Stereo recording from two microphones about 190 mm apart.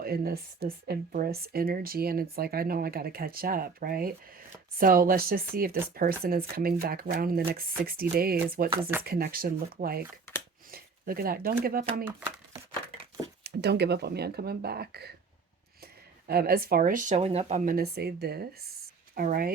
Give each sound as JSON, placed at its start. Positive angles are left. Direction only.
{"t": 0.0, "sound": "speech", "side_deg": -55}
{"t": 8.8, "sound": "speech", "side_deg": -10}
{"t": 9.0, "sound": "speech", "side_deg": -50}
{"t": 13.4, "sound": "speech", "side_deg": -60}
{"t": 17.7, "sound": "speech", "side_deg": -55}